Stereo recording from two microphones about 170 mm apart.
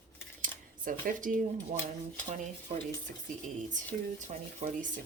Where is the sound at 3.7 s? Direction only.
50° right (ahead or behind).